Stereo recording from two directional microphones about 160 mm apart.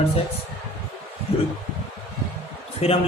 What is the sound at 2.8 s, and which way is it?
Speech, 40° left (ahead or behind).